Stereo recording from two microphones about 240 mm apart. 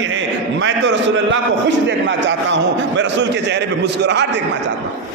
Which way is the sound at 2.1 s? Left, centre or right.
Right.